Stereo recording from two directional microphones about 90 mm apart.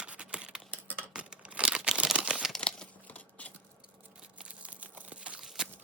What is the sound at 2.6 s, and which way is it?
Crumpling, 15° left (ahead or behind).